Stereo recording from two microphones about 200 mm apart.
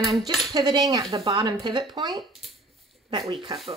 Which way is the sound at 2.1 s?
Centre (ahead or behind).